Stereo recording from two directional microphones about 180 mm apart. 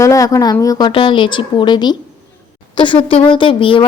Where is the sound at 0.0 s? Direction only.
20° left (ahead or behind).